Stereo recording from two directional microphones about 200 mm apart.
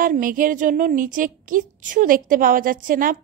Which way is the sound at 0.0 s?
45° right (ahead or behind).